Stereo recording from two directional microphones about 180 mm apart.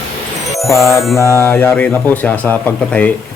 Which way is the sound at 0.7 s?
15° left (ahead or behind).